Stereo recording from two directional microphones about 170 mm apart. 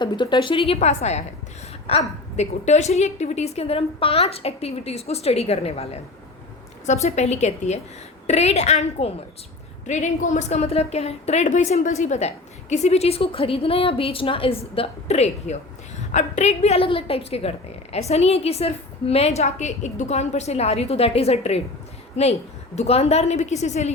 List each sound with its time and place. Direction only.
0.0 s a woman's voice: 25° left (ahead or behind)